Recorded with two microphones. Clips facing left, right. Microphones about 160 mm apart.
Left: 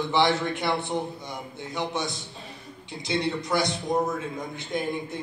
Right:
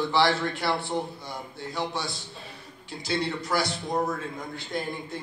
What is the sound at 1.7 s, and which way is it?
A man's voice, 20° left (ahead or behind).